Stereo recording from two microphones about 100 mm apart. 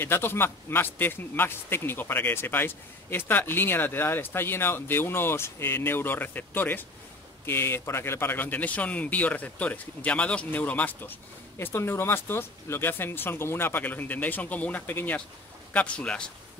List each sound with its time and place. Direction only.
0.0 s a man's voice: 20° left (ahead or behind)